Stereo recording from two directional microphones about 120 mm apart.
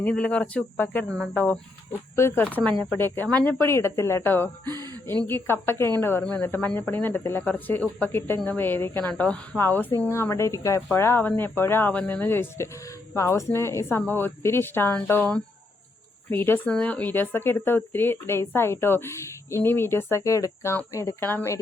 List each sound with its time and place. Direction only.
0.0 s speech: 10° left (ahead or behind)
2.1 s speech: 20° left (ahead or behind)
16.3 s speech: 20° left (ahead or behind)